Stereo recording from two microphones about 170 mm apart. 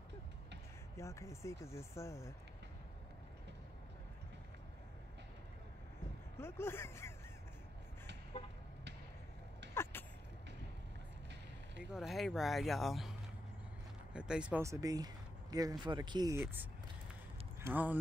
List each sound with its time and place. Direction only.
0.9 s speech: 15° left (ahead or behind)
6.3 s speech: 15° left (ahead or behind)
9.9 s vehicle: 10° left (ahead or behind)
11.9 s speech: centre (ahead or behind)
14.1 s speech: 5° right (ahead or behind)
14.6 s speech: 20° right (ahead or behind)